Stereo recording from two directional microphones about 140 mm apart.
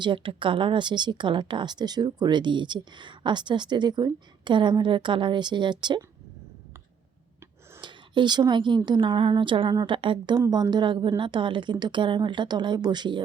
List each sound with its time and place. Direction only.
0.0 s speech: 35° right (ahead or behind)
7.8 s speech: 35° right (ahead or behind)